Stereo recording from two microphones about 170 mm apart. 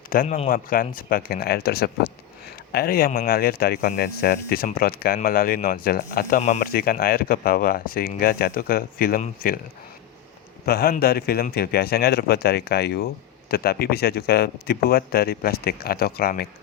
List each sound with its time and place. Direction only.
0.1 s speech: 55° left (ahead or behind)
10.7 s speech: 60° left (ahead or behind)